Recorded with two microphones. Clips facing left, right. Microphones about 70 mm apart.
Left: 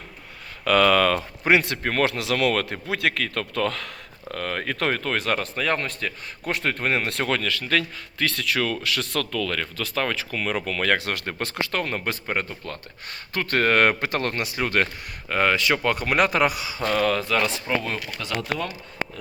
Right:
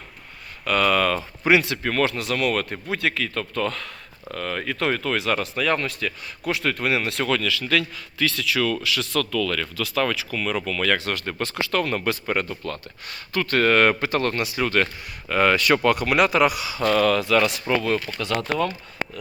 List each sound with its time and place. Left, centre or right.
0.6 s a man's voice: left
1.5 s speech: left
2.0 s speech: left
2.8 s a man's voice: left
4.4 s speech: left
8.2 s speech: left
9.3 s speech: left
10.9 s speech: left
11.7 s speech: left
15.4 s speech: centre